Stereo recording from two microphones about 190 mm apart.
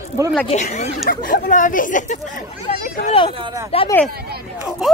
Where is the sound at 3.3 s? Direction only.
25° right (ahead or behind).